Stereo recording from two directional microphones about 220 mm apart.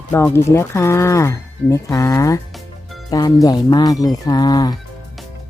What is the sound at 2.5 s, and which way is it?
Music, centre (ahead or behind).